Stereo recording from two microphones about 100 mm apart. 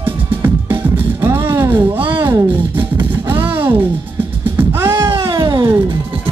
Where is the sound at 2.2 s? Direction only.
20° right (ahead or behind).